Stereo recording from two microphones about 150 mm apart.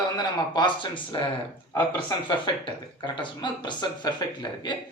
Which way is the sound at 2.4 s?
30° left (ahead or behind).